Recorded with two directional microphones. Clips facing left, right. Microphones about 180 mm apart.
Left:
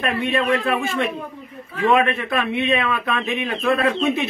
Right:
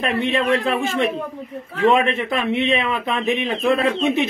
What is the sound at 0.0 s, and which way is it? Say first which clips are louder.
Speech: right 1 dB; 25° right (ahead or behind).